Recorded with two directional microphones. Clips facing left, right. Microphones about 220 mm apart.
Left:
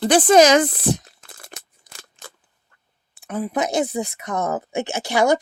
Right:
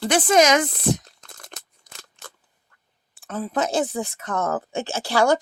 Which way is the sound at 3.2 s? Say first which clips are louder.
Left 2 dB; 15° left (ahead or behind).